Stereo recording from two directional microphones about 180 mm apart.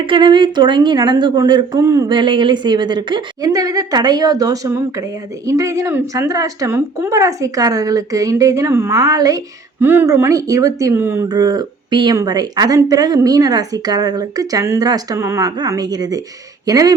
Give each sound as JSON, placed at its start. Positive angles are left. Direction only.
{"t": 0.0, "sound": "speech", "side_deg": -25}